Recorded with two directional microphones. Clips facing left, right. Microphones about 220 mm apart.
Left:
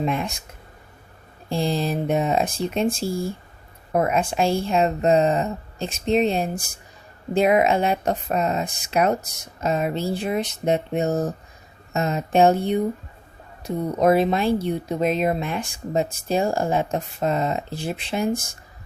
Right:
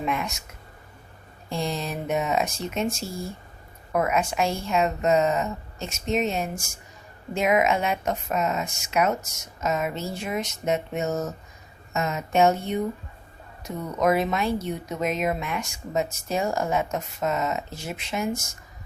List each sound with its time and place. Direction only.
0.0 s speech: 30° left (ahead or behind)
1.5 s speech: 30° left (ahead or behind)